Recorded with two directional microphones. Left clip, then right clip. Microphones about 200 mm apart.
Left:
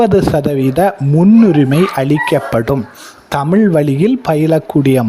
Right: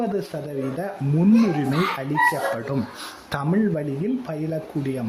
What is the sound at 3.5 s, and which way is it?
Speech, 45° left (ahead or behind).